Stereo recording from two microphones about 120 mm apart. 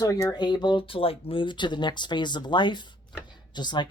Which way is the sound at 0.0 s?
30° left (ahead or behind).